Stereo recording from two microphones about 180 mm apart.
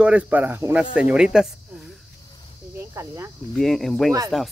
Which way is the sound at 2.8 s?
15° right (ahead or behind).